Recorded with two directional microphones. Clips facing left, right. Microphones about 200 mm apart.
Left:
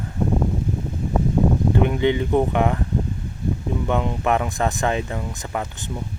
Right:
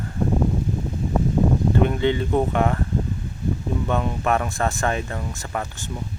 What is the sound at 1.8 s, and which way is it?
Speech, 15° left (ahead or behind).